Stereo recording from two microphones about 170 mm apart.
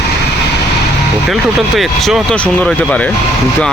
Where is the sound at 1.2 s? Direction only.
Centre (ahead or behind).